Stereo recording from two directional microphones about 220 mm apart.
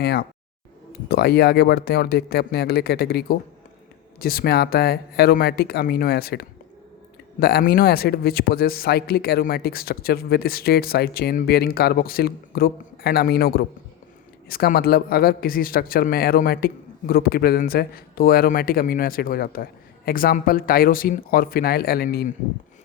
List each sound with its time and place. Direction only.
0.0 s speech: 45° left (ahead or behind)